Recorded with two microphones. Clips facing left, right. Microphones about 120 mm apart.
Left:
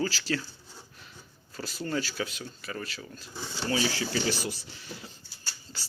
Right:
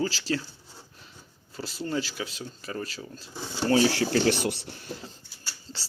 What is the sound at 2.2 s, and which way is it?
Speech, 30° right (ahead or behind).